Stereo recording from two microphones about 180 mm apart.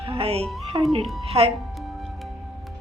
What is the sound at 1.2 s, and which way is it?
Speech, 30° right (ahead or behind).